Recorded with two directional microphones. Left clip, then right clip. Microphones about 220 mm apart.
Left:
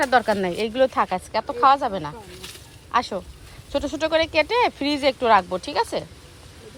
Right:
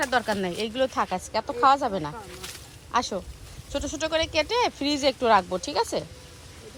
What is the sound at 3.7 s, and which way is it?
Speech, 15° right (ahead or behind).